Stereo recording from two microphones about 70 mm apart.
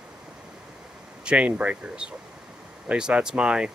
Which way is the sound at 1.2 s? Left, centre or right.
Centre.